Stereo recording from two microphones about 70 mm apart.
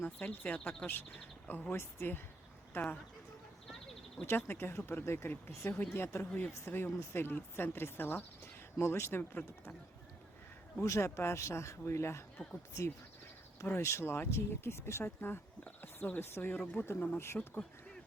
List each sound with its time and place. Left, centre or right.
0.0 s speech: left
4.3 s speech: left
10.8 s speech: left
13.7 s speech: left